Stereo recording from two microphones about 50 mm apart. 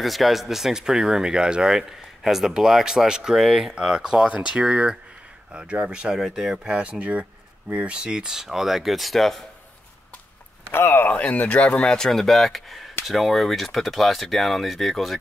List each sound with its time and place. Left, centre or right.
0.0 s speech: centre
6.2 s speech: centre
6.8 s speech: right; by 9.5 s centre
11.1 s speech: left
11.9 s speech: centre